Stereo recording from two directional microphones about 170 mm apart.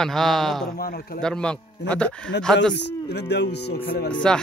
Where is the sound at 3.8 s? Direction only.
65° left (ahead or behind).